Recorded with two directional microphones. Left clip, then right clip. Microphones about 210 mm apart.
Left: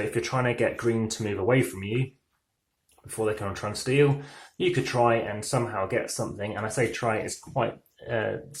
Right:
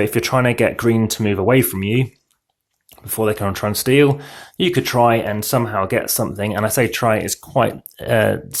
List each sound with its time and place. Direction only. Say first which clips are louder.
0.1 s speech: right 10 dB; 50° right (ahead or behind)
3.2 s speech: right 9 dB; 45° right (ahead or behind)